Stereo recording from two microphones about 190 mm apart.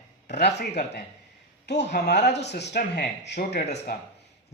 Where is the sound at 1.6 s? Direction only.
65° left (ahead or behind).